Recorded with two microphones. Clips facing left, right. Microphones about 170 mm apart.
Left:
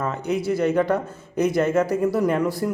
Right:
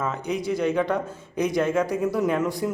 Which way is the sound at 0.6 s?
10° left (ahead or behind).